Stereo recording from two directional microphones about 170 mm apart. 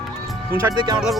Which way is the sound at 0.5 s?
20° right (ahead or behind).